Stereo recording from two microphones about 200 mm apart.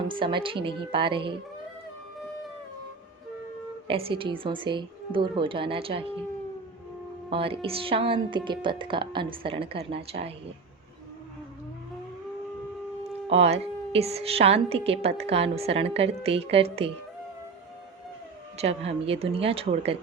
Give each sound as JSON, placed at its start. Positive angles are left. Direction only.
{"t": 0.1, "sound": "a woman's voice", "side_deg": -25}
{"t": 3.8, "sound": "a woman's voice", "side_deg": -30}
{"t": 7.3, "sound": "a woman's voice", "side_deg": -25}
{"t": 13.2, "sound": "a woman's voice", "side_deg": -30}
{"t": 18.5, "sound": "a woman's voice", "side_deg": -30}